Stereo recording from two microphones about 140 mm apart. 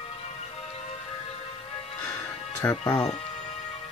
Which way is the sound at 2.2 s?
15° left (ahead or behind).